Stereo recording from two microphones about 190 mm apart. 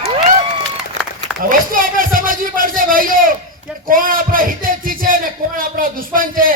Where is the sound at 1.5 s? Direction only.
45° right (ahead or behind).